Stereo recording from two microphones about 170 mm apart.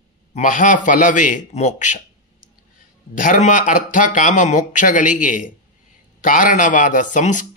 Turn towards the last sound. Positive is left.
turn(degrees=50)  # may be behind; listen again after turning